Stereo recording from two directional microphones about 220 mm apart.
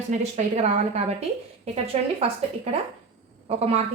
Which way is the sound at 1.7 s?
25° right (ahead or behind).